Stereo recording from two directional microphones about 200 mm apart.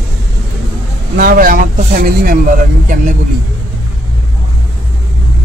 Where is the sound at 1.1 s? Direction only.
45° right (ahead or behind).